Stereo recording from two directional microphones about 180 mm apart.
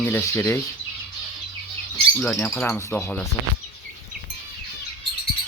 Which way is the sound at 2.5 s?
10° left (ahead or behind).